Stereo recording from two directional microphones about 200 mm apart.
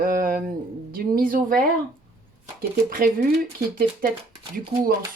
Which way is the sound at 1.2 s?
45° right (ahead or behind).